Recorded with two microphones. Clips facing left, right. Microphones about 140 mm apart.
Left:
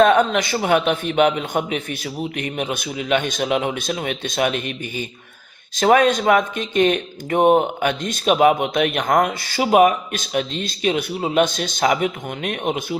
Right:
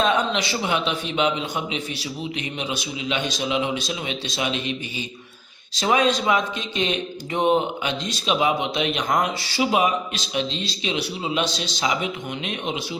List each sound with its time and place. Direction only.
0.0 s speech: 50° left (ahead or behind)